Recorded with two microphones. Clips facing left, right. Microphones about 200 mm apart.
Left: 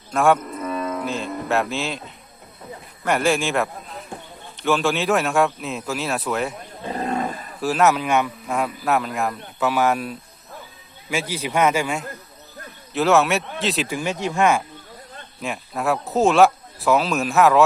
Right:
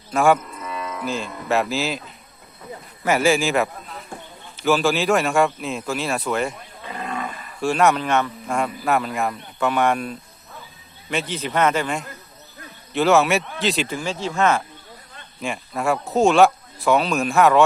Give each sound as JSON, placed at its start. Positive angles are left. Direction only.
{"t": 0.1, "sound": "speech", "side_deg": 0}
{"t": 0.5, "sound": "livestock", "side_deg": 50}
{"t": 1.0, "sound": "a man's voice", "side_deg": 0}
{"t": 3.0, "sound": "a man's voice", "side_deg": -5}
{"t": 4.1, "sound": "a sound", "side_deg": 20}
{"t": 4.5, "sound": "a man's voice", "side_deg": 0}
{"t": 6.8, "sound": "cattle", "side_deg": 35}
{"t": 7.6, "sound": "a man's voice", "side_deg": 5}
{"t": 13.8, "sound": "a man's voice", "side_deg": 15}
{"t": 15.4, "sound": "speech", "side_deg": 0}